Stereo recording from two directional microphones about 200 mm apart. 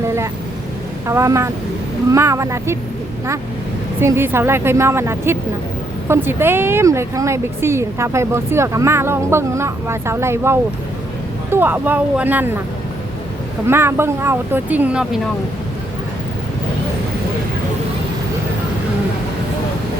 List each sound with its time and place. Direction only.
0.0 s vehicle: 15° right (ahead or behind)
1.0 s speech: 15° right (ahead or behind)
4.0 s speech: 10° right (ahead or behind)
13.7 s speech: 10° right (ahead or behind)